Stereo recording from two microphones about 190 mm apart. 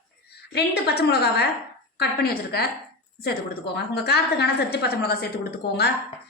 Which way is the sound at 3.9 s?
60° left (ahead or behind).